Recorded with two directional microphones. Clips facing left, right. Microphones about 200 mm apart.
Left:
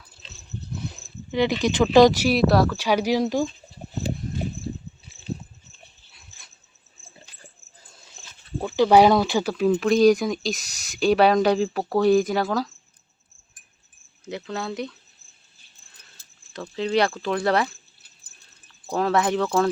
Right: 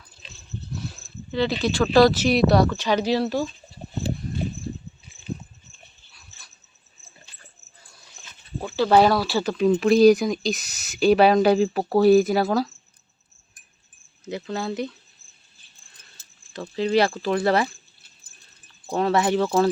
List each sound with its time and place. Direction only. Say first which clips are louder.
0.8 s a sound: even; 15° left (ahead or behind)
1.6 s speech: left 2 dB; 20° left (ahead or behind)
2.3 s speech: right 1 dB; centre (ahead or behind)
8.6 s speech: left 2 dB; 15° left (ahead or behind); by 12.6 s 10° right (ahead or behind)
14.3 s speech: right 2 dB; centre (ahead or behind)
16.5 s speech: right 2 dB; centre (ahead or behind)
18.9 s speech: right 1 dB; centre (ahead or behind)